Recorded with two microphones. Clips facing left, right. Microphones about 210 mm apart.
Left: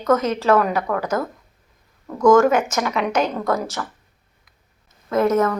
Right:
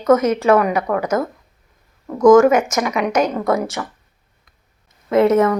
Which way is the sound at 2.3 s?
5° right (ahead or behind).